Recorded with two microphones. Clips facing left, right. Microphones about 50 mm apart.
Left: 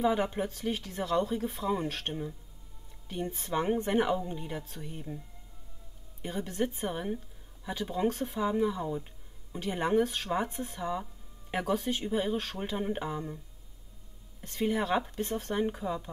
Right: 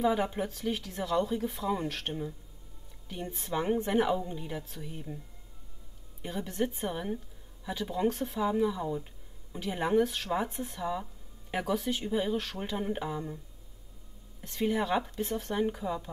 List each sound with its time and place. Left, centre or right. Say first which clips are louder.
0.0 s speech: even; centre
6.2 s speech: even; centre
12.3 s speech: even; left
12.5 s speech: even; centre
14.4 s speech: even; centre
15.5 s speech: even; centre